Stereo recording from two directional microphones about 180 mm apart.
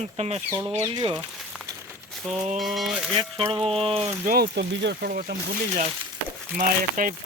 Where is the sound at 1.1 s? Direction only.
Centre (ahead or behind).